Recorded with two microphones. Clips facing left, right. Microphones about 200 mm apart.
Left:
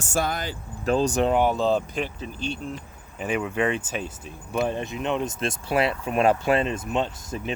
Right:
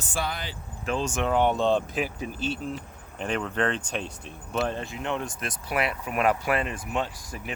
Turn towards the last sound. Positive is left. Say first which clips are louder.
# left 4 dB
turn(degrees=25)  # may be behind; listen again after turning